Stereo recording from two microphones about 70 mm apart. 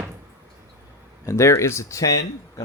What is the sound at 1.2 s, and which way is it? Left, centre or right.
Speech, left.